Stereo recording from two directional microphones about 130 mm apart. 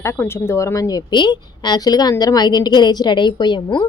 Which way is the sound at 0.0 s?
20° left (ahead or behind).